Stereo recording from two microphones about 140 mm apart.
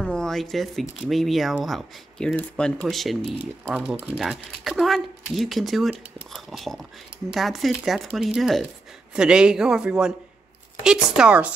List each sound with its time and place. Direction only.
0.0 s speech: 5° left (ahead or behind)
4.2 s speech: centre (ahead or behind)